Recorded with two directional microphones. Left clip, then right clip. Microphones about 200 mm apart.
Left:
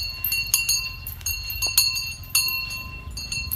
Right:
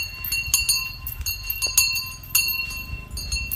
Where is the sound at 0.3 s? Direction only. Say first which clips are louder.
Even; 5° left (ahead or behind).